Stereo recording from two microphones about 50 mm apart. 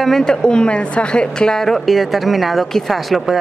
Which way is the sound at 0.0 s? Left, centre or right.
Centre.